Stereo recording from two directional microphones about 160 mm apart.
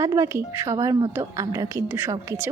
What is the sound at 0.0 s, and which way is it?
Speech, 20° right (ahead or behind).